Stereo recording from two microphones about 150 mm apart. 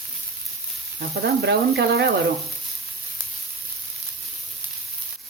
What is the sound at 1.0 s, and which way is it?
Speech, 90° right.